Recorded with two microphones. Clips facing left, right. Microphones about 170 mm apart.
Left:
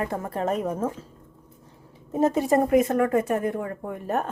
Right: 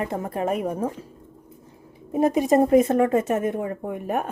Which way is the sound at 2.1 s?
15° right (ahead or behind).